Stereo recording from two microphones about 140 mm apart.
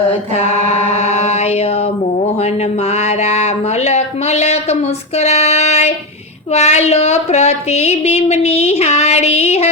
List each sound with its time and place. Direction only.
0.9 s mantra: 50° left (ahead or behind)
2.9 s a woman's voice: 55° left (ahead or behind)